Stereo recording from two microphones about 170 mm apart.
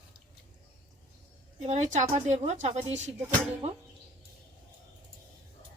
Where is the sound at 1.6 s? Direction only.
45° right (ahead or behind).